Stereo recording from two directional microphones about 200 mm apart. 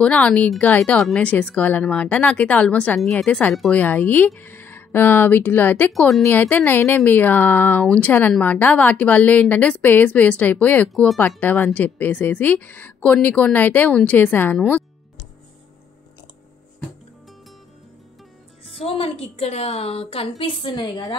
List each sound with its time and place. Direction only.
0.0 s a woman's voice: 5° left (ahead or behind)
18.7 s a woman's voice: 30° left (ahead or behind)